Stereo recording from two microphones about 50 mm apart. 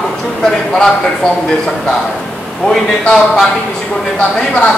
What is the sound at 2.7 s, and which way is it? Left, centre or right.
Speech, centre.